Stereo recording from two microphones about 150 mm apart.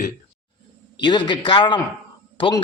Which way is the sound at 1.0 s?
30° left (ahead or behind).